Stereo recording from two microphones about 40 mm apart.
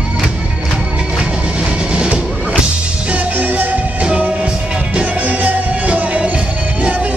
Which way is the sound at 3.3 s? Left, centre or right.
Right.